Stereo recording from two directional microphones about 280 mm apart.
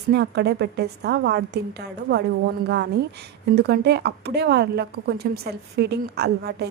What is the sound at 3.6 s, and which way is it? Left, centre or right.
A woman's voice, right.